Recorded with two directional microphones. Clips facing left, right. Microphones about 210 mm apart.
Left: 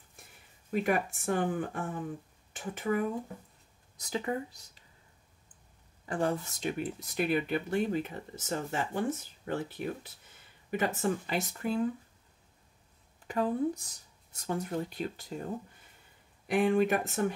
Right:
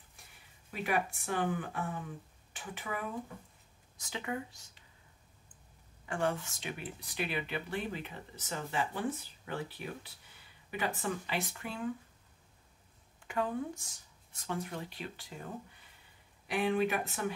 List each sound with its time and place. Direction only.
0.7 s speech: 45° left (ahead or behind)
6.0 s speech: 35° left (ahead or behind)
13.3 s speech: 35° left (ahead or behind)
16.4 s speech: 45° left (ahead or behind)